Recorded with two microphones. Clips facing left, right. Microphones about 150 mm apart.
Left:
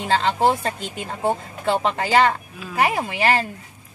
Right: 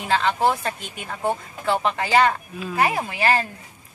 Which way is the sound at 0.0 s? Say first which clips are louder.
Left 2 dB; 30° left (ahead or behind).